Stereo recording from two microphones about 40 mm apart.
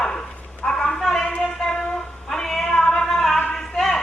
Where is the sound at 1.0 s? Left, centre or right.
Centre.